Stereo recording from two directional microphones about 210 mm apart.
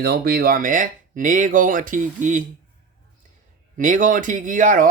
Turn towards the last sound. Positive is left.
turn(degrees=-40)  # may be behind; listen again after turning